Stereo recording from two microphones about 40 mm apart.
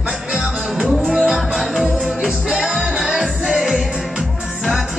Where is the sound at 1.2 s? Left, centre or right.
Centre.